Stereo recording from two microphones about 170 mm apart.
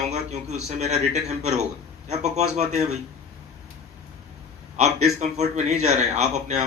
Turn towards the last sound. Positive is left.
turn(degrees=-40)  # may be behind; listen again after turning